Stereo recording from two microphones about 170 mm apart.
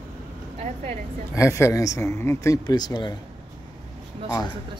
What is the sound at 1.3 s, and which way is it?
Speech, 15° left (ahead or behind).